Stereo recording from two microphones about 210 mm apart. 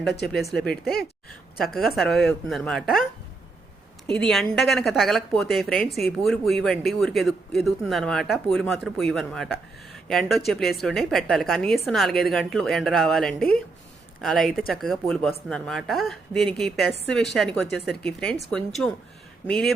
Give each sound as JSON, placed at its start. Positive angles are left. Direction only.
{"t": 0.1, "sound": "speech", "side_deg": 50}
{"t": 0.5, "sound": "speech", "side_deg": 0}
{"t": 4.1, "sound": "speech", "side_deg": 5}